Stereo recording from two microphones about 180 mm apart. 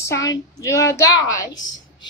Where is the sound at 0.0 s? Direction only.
15° left (ahead or behind).